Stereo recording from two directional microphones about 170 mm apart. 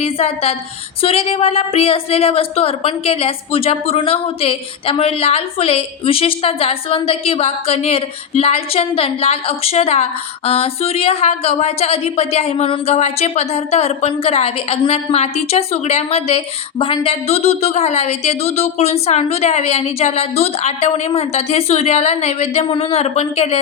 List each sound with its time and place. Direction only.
0.0 s a woman's voice: 35° left (ahead or behind)